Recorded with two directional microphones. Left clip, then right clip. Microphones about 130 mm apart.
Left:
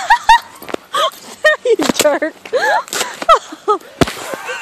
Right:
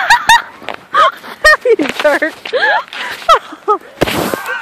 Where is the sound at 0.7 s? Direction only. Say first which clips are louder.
Left 4 dB; 90° right.